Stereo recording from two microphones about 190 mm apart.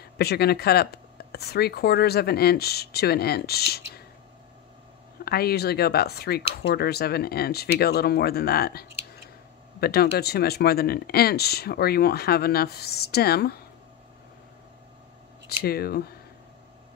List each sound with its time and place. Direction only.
0.0 s speech: 55° left (ahead or behind)
5.2 s speech: 55° left (ahead or behind)
15.6 s speech: 55° left (ahead or behind)